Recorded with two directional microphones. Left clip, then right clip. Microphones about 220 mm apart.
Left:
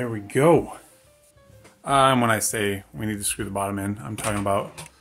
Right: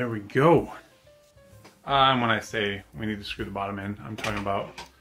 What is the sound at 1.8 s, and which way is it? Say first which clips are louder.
Speech: left 3 dB; 60° left (ahead or behind).